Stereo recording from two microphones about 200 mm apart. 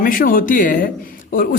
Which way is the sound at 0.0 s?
45° left (ahead or behind).